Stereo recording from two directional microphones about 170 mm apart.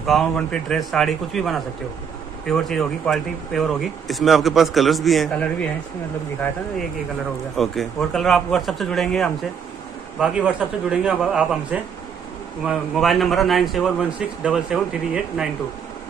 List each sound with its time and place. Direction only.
0.0 s speech: centre (ahead or behind)
7.5 s speech: centre (ahead or behind)